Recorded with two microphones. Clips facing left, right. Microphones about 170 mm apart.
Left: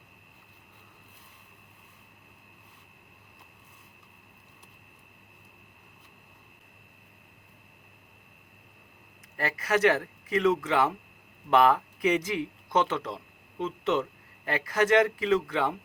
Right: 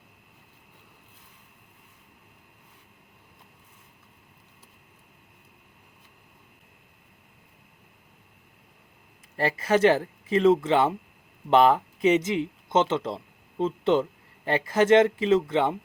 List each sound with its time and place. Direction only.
9.4 s speech: 25° right (ahead or behind)